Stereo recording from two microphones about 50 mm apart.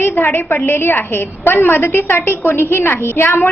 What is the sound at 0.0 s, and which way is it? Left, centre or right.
A woman's voice, left.